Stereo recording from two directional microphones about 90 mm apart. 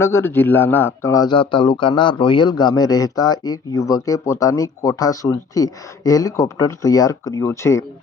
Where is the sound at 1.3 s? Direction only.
70° left (ahead or behind).